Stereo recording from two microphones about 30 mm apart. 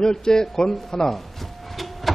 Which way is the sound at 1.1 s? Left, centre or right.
Centre.